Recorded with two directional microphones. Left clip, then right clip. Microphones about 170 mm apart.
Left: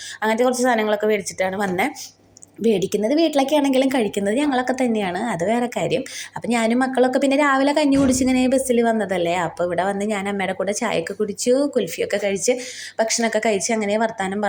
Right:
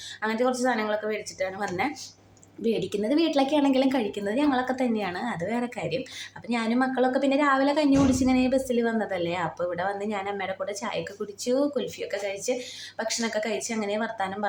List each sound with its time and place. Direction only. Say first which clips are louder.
0.2 s a woman's voice: left 7 dB; 25° left (ahead or behind)